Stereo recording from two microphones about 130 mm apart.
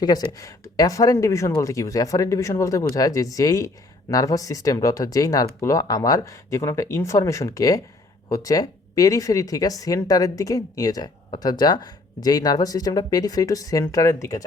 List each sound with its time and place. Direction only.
0.0 s speech: 30° left (ahead or behind)